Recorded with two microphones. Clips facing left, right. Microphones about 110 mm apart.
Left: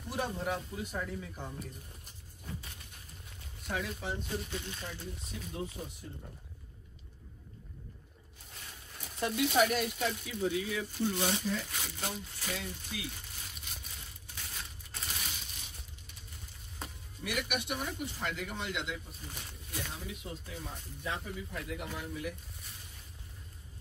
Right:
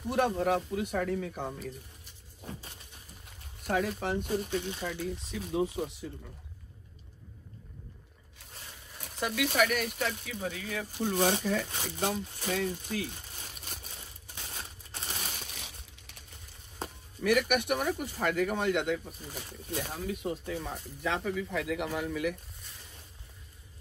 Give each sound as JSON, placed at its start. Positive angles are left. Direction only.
{"t": 0.1, "sound": "speech", "side_deg": -65}
{"t": 3.6, "sound": "speech", "side_deg": -50}
{"t": 4.8, "sound": "speech", "side_deg": -85}
{"t": 9.1, "sound": "speech", "side_deg": -70}
{"t": 11.7, "sound": "speech", "side_deg": -35}
{"t": 12.4, "sound": "speech", "side_deg": -55}
{"t": 12.9, "sound": "crumpling", "side_deg": -45}
{"t": 14.3, "sound": "a sound", "side_deg": -35}
{"t": 15.3, "sound": "crushing", "side_deg": -70}
{"t": 17.2, "sound": "speech", "side_deg": -55}